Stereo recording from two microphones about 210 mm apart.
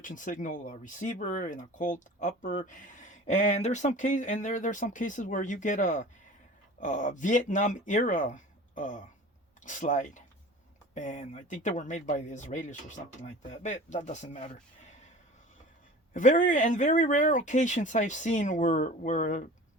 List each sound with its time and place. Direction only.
0.0 s speech: 40° left (ahead or behind)
16.1 s speech: 35° left (ahead or behind)